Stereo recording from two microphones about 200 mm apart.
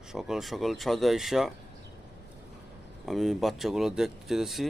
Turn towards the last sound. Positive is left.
turn(degrees=0)  # may be behind; listen again after turning